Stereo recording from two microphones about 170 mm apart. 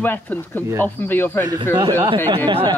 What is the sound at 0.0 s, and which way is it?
Speech, 10° left (ahead or behind).